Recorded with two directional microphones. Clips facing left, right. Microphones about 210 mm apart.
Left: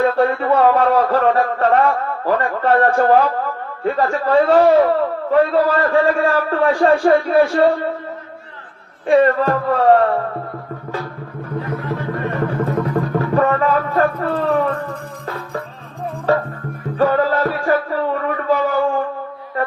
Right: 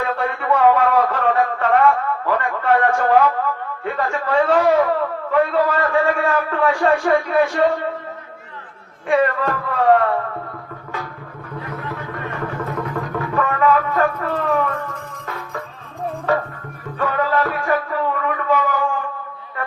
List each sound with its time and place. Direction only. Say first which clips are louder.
0.0 s a sound: left 7 dB; 30° left (ahead or behind)
3.8 s a man's voice: left 5 dB; 35° left (ahead or behind)
9.0 s a man's voice: left 5 dB; 30° left (ahead or behind)
12.9 s music: left 6 dB; 35° left (ahead or behind)
16.3 s a man's voice: left 3 dB; 35° left (ahead or behind)
17.0 s music: left 4 dB; 35° left (ahead or behind)